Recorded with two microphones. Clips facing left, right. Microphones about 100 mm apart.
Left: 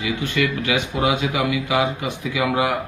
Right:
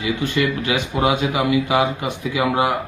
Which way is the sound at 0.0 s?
35° right (ahead or behind).